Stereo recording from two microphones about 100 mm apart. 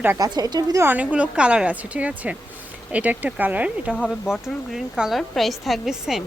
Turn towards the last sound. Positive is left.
turn(degrees=-5)  # may be behind; listen again after turning